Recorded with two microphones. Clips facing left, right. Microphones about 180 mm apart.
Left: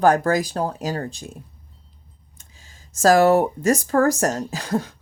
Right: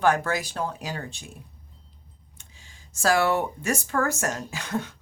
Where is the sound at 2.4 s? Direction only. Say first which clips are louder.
Left 2 dB; 40° left (ahead or behind).